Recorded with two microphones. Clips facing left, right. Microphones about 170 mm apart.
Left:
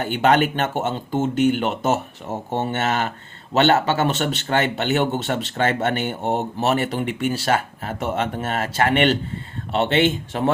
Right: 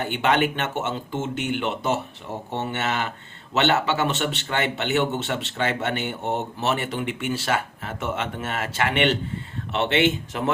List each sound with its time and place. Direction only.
0.0 s speech: 40° left (ahead or behind)